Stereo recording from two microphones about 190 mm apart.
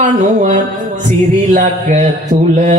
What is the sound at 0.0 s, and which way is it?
Speech, 40° right (ahead or behind).